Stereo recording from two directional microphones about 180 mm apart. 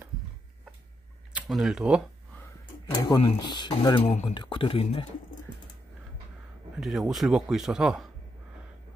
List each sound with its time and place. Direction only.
1.3 s speech: 5° right (ahead or behind)
3.1 s speech: 25° left (ahead or behind)
6.8 s a man's voice: centre (ahead or behind)